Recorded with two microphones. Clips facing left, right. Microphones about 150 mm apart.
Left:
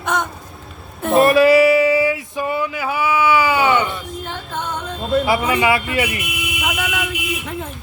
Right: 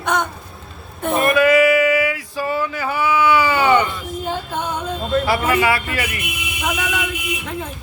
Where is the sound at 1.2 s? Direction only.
30° left (ahead or behind); by 3.9 s 10° left (ahead or behind).